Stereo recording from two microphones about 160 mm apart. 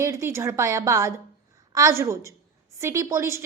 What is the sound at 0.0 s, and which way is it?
A woman's voice, 15° right (ahead or behind).